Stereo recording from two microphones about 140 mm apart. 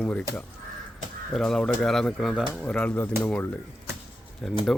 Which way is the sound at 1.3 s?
5° left (ahead or behind).